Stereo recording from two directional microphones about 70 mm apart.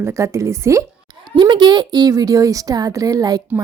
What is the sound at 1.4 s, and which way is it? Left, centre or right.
A woman's voice, right.